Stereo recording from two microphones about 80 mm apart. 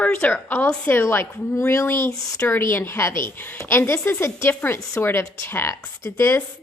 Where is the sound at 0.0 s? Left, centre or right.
Centre.